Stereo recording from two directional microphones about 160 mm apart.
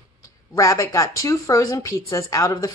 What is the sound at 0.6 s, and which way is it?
A woman's voice, 20° left (ahead or behind).